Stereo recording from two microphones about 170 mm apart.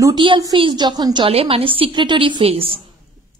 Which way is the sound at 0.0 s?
25° right (ahead or behind).